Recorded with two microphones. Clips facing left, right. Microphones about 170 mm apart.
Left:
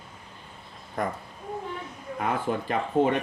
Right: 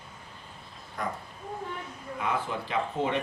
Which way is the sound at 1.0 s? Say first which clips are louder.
Left 5 dB; 50° left (ahead or behind).